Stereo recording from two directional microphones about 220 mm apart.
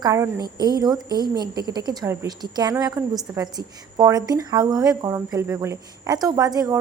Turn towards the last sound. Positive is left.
turn(degrees=-15)  # may be behind; listen again after turning